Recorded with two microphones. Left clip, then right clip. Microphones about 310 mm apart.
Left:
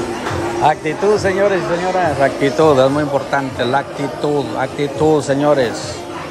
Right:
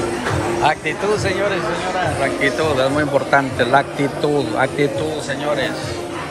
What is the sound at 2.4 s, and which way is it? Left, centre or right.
A man's voice, centre.